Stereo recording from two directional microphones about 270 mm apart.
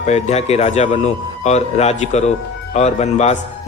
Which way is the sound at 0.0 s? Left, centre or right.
Left.